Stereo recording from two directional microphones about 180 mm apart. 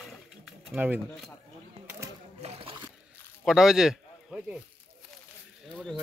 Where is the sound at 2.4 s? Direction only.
30° right (ahead or behind).